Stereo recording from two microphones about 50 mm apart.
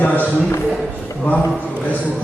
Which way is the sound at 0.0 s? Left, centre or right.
Left.